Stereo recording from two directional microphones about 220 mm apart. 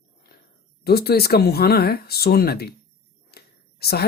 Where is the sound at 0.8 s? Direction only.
45° left (ahead or behind).